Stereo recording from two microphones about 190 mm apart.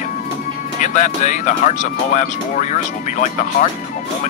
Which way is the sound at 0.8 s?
40° left (ahead or behind).